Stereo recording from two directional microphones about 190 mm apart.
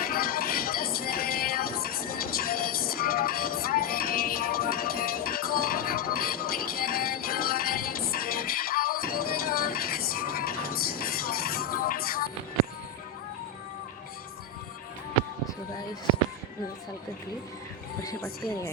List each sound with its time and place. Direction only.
0.0 s music: 50° left (ahead or behind)
18.0 s speech: 15° left (ahead or behind)